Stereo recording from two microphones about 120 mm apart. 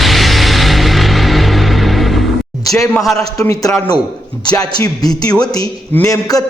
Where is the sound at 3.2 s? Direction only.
30° left (ahead or behind).